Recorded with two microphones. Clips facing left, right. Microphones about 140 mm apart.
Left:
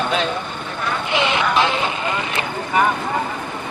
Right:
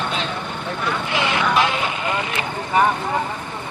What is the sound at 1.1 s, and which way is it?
Vehicle, 20° left (ahead or behind).